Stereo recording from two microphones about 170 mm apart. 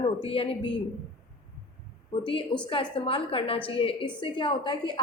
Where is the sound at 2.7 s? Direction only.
30° left (ahead or behind).